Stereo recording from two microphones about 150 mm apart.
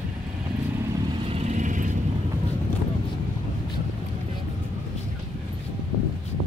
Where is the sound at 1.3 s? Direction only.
50° right (ahead or behind).